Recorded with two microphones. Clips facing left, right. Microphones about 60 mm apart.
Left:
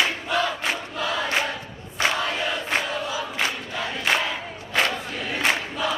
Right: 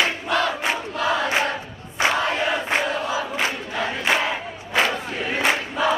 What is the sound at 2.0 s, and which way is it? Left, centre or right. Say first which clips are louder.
Crowd: right 3 dB; centre.